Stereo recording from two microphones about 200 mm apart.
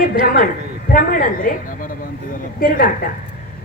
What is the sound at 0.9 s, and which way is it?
Speech, 45° left (ahead or behind).